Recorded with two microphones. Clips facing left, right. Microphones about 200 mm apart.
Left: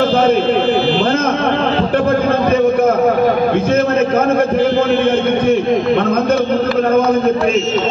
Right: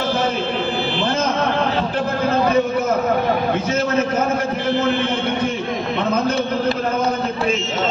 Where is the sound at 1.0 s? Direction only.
55° left (ahead or behind).